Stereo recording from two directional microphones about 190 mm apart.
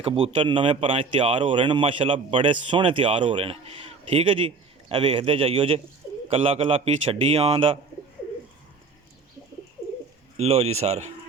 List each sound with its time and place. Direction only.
0.0 s speech: 25° right (ahead or behind)
10.3 s speech: 35° right (ahead or behind)